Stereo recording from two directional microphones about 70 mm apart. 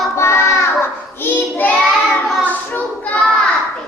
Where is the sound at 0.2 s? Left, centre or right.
Left.